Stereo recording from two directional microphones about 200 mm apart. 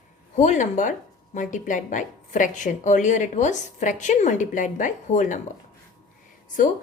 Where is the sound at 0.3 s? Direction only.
35° left (ahead or behind).